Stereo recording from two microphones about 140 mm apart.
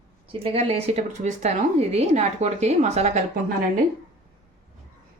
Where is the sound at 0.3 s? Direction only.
45° right (ahead or behind).